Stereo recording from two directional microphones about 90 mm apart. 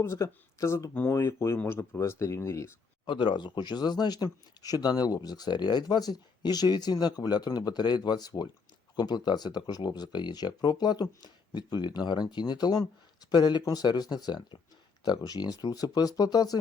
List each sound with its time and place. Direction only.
0.0 s speech: 35° left (ahead or behind)
3.1 s speech: 60° left (ahead or behind)